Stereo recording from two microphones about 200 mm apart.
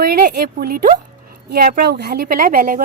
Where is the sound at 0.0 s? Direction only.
45° right (ahead or behind).